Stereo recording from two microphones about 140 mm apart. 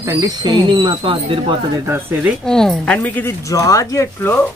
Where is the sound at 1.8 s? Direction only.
15° right (ahead or behind).